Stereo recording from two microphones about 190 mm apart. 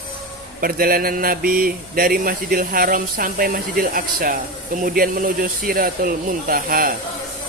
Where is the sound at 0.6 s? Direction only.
50° right (ahead or behind).